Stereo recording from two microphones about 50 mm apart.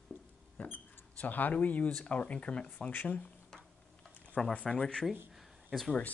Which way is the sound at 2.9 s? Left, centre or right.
Left.